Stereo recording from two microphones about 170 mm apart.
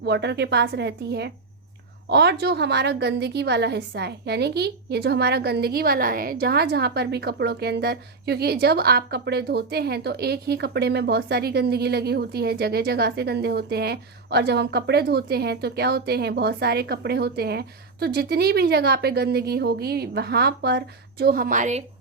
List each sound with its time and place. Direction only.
0.0 s a woman's voice: 90° right; by 21.8 s 45° right (ahead or behind)